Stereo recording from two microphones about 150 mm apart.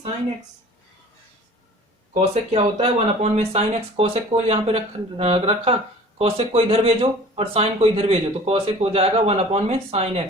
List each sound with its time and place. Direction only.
2.1 s speech: 45° right (ahead or behind)